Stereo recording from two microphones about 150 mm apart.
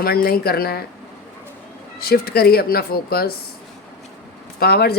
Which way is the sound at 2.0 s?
90° left.